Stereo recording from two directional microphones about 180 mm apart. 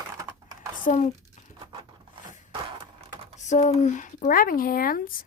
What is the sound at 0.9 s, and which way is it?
Speech, 40° left (ahead or behind).